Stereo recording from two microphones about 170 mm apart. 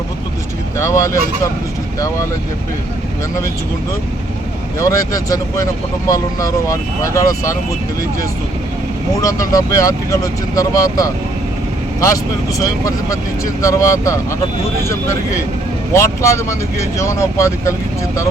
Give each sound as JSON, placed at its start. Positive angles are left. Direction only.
{"t": 0.8, "sound": "speech", "side_deg": 15}
{"t": 4.8, "sound": "speech", "side_deg": 20}
{"t": 9.2, "sound": "speech", "side_deg": 20}